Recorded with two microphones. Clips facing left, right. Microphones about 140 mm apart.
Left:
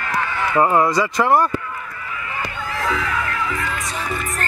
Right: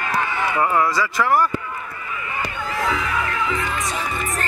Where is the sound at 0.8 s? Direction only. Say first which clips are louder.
Left 3 dB; 20° left (ahead or behind).